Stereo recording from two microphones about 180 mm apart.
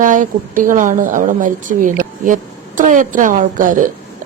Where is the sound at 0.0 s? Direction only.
45° right (ahead or behind).